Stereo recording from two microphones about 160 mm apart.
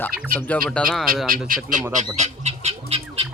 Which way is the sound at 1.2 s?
60° right (ahead or behind).